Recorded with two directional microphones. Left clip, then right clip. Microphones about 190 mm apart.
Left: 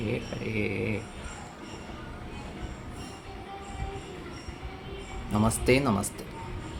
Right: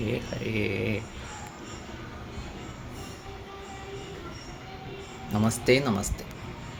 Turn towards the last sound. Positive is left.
turn(degrees=10)  # may be behind; listen again after turning